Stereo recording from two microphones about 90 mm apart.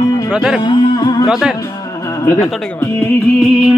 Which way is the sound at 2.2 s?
30° left (ahead or behind).